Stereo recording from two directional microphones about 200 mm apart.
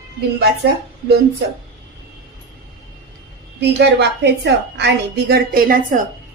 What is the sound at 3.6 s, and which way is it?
A woman's voice, 60° right (ahead or behind).